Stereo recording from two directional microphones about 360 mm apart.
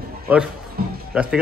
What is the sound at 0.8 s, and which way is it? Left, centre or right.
Music, right.